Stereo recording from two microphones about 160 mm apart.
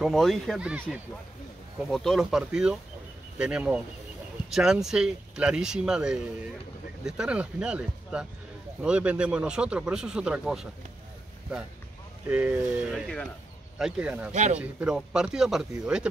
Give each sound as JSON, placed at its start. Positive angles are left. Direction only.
{"t": 0.0, "sound": "speech", "side_deg": 0}
{"t": 1.9, "sound": "speech", "side_deg": 0}
{"t": 12.3, "sound": "speech", "side_deg": -10}
{"t": 14.3, "sound": "a man's voice", "side_deg": -45}
{"t": 14.6, "sound": "speech", "side_deg": -5}